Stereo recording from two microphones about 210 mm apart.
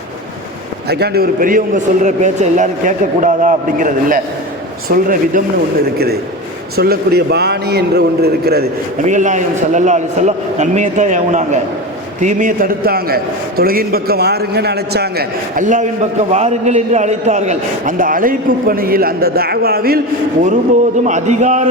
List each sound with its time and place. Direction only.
0.9 s a man's voice: 50° right (ahead or behind)
6.7 s a man's voice: 45° right (ahead or behind)
9.0 s a man's voice: 35° right (ahead or behind)
21.0 s a man's voice: 35° right (ahead or behind)